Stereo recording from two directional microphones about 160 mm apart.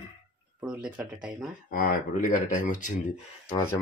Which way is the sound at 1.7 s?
65° left (ahead or behind).